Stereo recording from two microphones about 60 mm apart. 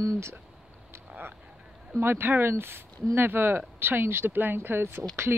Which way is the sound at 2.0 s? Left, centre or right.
Right.